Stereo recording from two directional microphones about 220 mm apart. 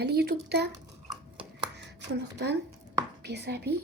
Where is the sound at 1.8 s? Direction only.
50° right (ahead or behind).